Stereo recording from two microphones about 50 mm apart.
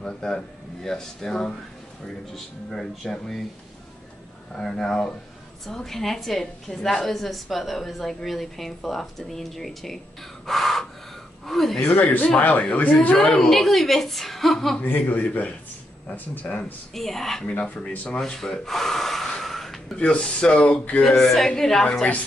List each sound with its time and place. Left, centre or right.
0.0 s a woman's voice: centre
4.6 s a woman's voice: centre
10.4 s crow: centre
11.4 s a woman's voice: centre
11.8 s speech: left
13.2 s a woman's voice: centre
14.8 s speech: left
16.9 s a woman's voice: centre
20.0 s speech: centre
21.0 s a woman's voice: centre